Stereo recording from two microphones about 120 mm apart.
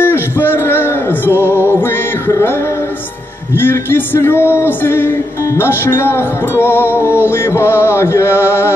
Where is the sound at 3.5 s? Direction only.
20° left (ahead or behind).